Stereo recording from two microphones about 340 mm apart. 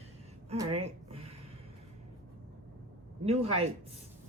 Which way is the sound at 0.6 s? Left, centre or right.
Centre.